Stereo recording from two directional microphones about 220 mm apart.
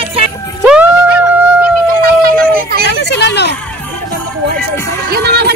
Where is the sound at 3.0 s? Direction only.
50° left (ahead or behind).